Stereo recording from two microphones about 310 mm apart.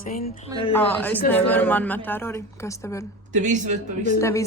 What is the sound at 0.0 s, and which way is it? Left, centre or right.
Speech, left.